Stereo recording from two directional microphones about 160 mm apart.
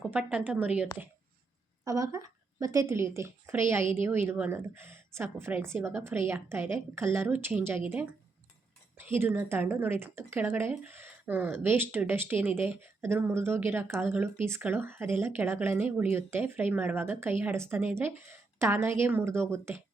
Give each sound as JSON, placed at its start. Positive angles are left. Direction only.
{"t": 0.1, "sound": "speech", "side_deg": -10}
{"t": 1.8, "sound": "a woman's voice", "side_deg": -20}
{"t": 9.1, "sound": "speech", "side_deg": -15}